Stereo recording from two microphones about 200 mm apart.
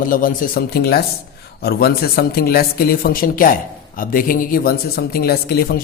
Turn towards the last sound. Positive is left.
turn(degrees=50)  # may be behind; listen again after turning